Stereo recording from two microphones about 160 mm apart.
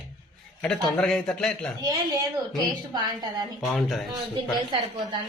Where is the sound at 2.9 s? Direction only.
25° right (ahead or behind).